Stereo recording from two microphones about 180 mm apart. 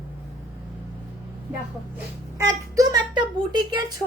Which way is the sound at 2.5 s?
20° right (ahead or behind).